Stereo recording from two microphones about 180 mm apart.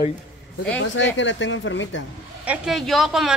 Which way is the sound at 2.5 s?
Centre (ahead or behind).